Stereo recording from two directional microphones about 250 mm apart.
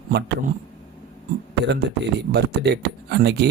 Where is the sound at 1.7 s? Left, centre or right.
Right.